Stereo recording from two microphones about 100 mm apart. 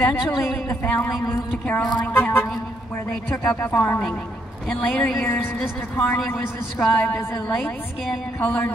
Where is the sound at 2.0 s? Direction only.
20° left (ahead or behind).